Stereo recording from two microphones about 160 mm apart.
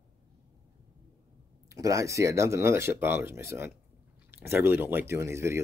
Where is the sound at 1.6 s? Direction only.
20° right (ahead or behind).